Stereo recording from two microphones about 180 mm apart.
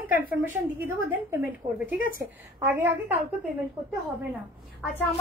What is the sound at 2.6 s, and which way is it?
Speech, 10° right (ahead or behind).